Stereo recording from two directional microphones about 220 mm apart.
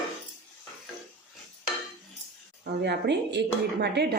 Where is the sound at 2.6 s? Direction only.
50° right (ahead or behind).